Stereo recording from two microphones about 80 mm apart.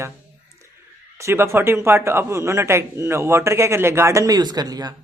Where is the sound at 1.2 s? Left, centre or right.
Right.